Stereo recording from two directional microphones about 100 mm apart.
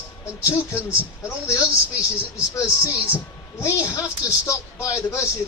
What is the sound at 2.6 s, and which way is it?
A man's voice, 30° left (ahead or behind).